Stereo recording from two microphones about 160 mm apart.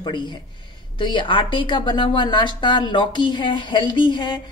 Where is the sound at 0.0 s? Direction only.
30° left (ahead or behind).